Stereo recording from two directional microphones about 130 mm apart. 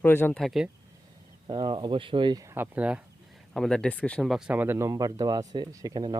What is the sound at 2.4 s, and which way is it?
Speech, 15° right (ahead or behind).